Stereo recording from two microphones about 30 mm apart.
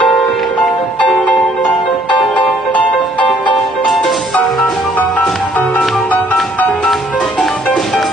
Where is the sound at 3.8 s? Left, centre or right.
Centre.